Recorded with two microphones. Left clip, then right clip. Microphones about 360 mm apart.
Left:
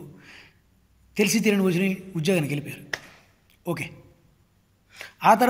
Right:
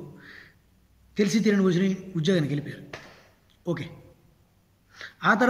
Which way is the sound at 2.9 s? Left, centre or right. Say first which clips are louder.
Left 13 dB; left.